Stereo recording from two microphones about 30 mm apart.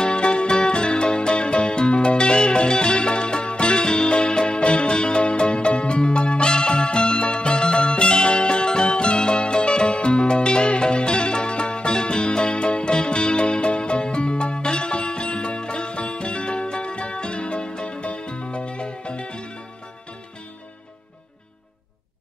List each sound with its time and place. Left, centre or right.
0.0 s music: left